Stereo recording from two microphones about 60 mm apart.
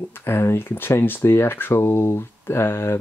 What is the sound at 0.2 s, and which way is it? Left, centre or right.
Speech, left.